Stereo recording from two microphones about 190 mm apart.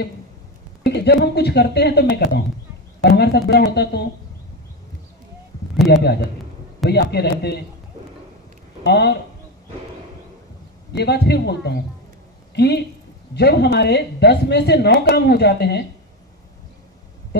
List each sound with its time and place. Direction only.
0.8 s speech: 60° left (ahead or behind)
5.9 s speech: 60° left (ahead or behind)
8.8 s speech: 60° left (ahead or behind)
10.9 s speech: 60° left (ahead or behind)